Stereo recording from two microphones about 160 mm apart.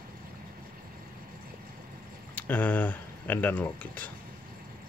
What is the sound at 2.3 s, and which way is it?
Speech, 10° left (ahead or behind).